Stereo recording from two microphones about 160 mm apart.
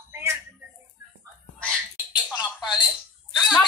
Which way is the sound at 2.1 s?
5° right (ahead or behind).